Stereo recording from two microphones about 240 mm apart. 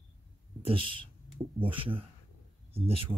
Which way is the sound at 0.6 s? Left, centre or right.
Right.